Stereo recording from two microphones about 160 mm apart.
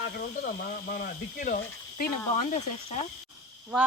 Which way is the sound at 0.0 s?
70° left (ahead or behind).